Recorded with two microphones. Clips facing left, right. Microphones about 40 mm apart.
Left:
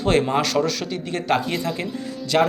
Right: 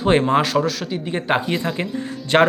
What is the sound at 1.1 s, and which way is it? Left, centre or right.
Speech, right.